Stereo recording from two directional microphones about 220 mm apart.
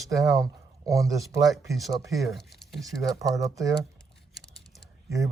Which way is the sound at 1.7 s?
Centre (ahead or behind).